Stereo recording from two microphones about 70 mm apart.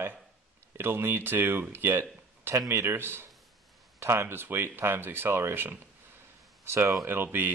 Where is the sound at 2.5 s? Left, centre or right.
Right.